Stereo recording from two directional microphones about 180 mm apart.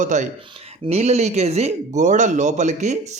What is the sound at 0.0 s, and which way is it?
Speech, 45° right (ahead or behind).